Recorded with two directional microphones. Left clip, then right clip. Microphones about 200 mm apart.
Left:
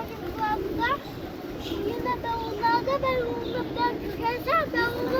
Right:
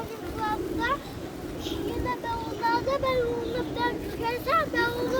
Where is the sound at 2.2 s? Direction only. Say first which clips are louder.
Left 3 dB; 5° right (ahead or behind).